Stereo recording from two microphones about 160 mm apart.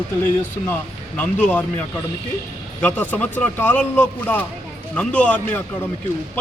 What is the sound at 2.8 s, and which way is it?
A man's voice, 10° left (ahead or behind).